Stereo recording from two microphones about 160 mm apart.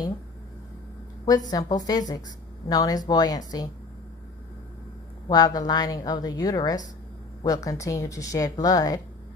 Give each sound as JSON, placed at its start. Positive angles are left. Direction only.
{"t": 1.2, "sound": "a woman's voice", "side_deg": 25}
{"t": 5.3, "sound": "a woman's voice", "side_deg": 25}